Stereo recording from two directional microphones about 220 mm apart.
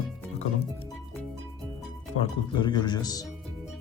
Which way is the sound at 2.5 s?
20° left (ahead or behind).